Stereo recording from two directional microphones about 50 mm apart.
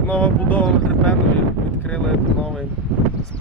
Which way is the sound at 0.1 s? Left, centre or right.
Left.